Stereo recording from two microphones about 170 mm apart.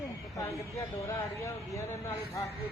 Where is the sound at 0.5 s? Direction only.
15° left (ahead or behind).